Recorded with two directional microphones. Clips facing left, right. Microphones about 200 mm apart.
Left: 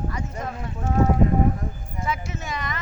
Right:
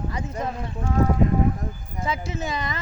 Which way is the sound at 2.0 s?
30° right (ahead or behind).